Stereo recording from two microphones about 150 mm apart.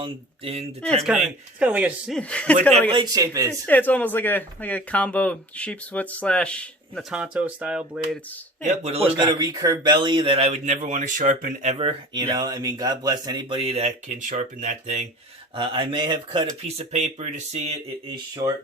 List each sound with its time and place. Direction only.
0.0 s speech: 40° right (ahead or behind)
1.0 s speech: 5° right (ahead or behind)
2.1 s speech: 10° left (ahead or behind)
2.9 s speech: 25° right (ahead or behind)
3.7 s speech: 10° left (ahead or behind)
7.1 s speech: 10° right (ahead or behind)
8.7 s a man's voice: 45° right (ahead or behind)
9.2 s speech: 25° right (ahead or behind); by 11.9 s 45° right (ahead or behind)
12.1 s speech: 25° right (ahead or behind); by 15.0 s 50° right (ahead or behind)
15.5 s speech: 35° right (ahead or behind)